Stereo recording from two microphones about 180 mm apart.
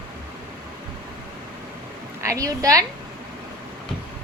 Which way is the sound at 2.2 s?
15° right (ahead or behind).